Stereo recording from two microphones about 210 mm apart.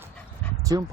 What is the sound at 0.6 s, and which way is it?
Dog, 15° right (ahead or behind).